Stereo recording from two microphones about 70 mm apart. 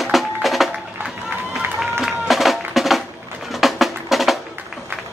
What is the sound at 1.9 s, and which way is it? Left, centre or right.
Music, centre.